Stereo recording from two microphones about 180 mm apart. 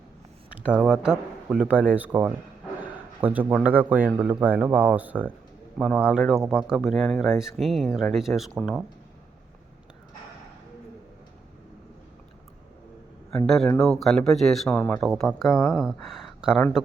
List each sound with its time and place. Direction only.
0.8 s a man's voice: 5° right (ahead or behind)
13.3 s speech: 5° left (ahead or behind)